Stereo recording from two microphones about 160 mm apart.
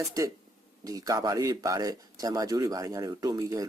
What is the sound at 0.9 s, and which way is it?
Speech, 20° right (ahead or behind).